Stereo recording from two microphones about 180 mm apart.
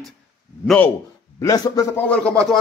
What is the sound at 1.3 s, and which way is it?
Speech, 20° left (ahead or behind).